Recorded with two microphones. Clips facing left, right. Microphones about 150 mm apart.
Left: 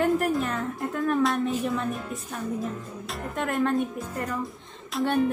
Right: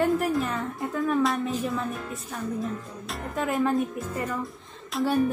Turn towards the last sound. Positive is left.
turn(degrees=0)  # may be behind; listen again after turning